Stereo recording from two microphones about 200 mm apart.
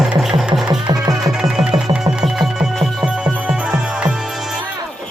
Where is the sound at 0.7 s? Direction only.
20° right (ahead or behind).